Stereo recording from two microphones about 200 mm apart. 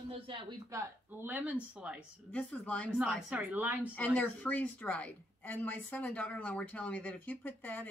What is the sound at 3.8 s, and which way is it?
A woman's voice, 10° left (ahead or behind).